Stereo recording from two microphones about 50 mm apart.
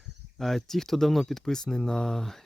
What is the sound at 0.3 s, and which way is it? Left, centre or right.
Speech, centre.